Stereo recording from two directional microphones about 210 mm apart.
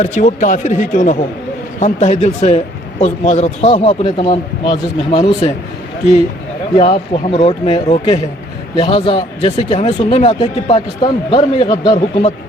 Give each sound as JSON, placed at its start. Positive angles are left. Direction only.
{"t": 0.0, "sound": "speech", "side_deg": 35}
{"t": 6.7, "sound": "speech", "side_deg": 30}